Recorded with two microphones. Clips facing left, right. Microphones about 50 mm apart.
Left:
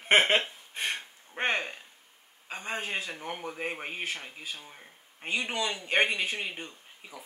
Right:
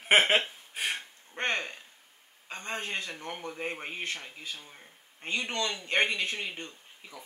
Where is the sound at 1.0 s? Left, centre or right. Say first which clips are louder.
Left 2 dB; centre.